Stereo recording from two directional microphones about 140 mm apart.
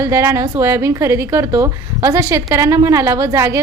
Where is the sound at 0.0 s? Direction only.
20° right (ahead or behind).